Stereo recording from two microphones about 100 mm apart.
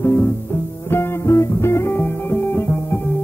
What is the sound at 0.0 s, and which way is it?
Music, 25° left (ahead or behind).